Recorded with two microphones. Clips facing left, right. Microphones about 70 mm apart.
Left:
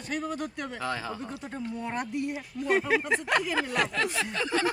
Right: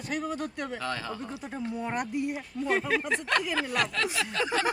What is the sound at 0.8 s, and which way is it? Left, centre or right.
Speech, centre.